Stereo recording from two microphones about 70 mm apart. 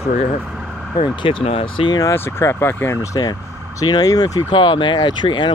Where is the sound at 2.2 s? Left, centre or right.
Left.